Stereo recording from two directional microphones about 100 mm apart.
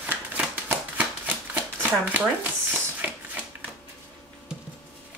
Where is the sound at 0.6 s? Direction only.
20° right (ahead or behind).